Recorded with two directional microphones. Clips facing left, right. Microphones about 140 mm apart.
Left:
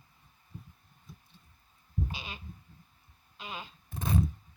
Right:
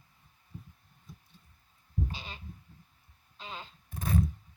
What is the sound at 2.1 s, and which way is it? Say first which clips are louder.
Speech: left 1 dB; 10° left (ahead or behind).